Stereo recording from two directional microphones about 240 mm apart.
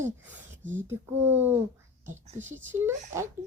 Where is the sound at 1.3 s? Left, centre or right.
Centre.